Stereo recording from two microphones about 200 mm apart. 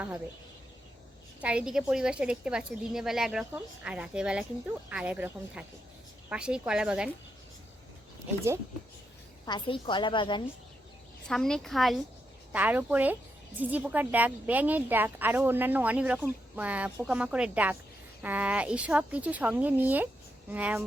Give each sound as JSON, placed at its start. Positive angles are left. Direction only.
{"t": 1.4, "sound": "a woman's voice", "side_deg": -5}
{"t": 9.5, "sound": "a woman's voice", "side_deg": 25}
{"t": 11.3, "sound": "a woman's voice", "side_deg": 0}